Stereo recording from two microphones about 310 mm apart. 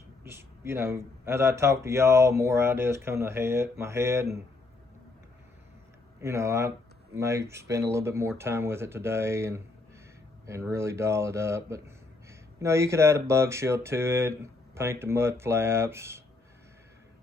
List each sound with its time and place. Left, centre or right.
0.3 s speech: centre
6.2 s speech: centre